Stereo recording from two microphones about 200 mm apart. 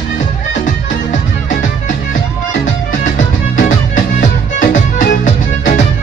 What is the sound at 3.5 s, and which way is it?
Music, 40° left (ahead or behind).